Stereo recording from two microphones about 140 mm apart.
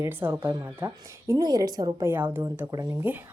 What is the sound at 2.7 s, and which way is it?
Speech, 25° right (ahead or behind).